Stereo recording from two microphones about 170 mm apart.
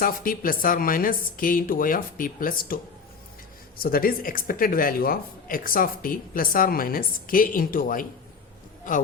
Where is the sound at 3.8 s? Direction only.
60° left (ahead or behind).